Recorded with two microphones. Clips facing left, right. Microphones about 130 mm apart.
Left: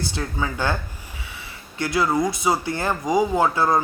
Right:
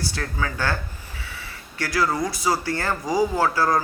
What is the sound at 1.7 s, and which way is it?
Speech, 20° left (ahead or behind).